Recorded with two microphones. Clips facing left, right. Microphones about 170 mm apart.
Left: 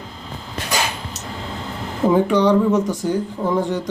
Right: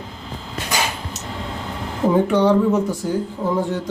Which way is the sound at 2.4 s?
5° right (ahead or behind).